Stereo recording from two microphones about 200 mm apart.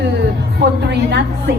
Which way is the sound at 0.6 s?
55° right (ahead or behind).